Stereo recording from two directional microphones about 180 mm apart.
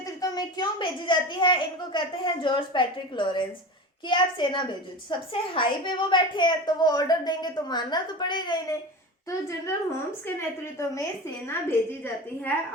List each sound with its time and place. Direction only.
0.0 s a woman's voice: 20° left (ahead or behind)
10.2 s a woman's voice: 15° left (ahead or behind)